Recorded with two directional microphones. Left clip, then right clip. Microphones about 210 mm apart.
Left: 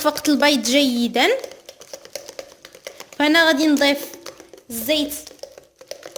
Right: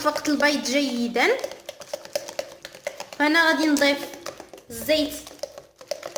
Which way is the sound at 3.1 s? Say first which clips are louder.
Left 4 dB; 45° left (ahead or behind).